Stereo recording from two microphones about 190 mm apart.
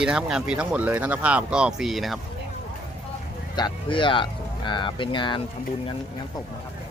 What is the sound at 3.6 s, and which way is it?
Speech, 25° left (ahead or behind).